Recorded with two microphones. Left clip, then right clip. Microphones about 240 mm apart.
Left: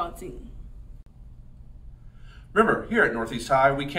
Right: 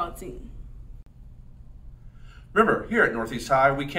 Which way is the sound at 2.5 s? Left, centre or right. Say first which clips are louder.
Even; centre.